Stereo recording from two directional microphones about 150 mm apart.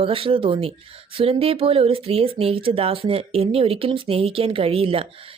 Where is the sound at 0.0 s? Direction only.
40° right (ahead or behind).